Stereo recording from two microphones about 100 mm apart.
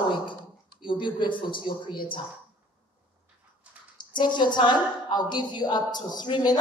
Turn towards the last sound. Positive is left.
turn(degrees=45)  # may be behind; listen again after turning